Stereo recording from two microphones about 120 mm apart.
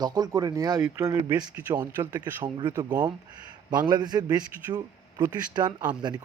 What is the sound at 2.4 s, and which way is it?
Speech, 40° right (ahead or behind).